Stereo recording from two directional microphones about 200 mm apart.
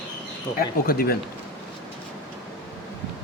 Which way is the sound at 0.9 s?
50° left (ahead or behind).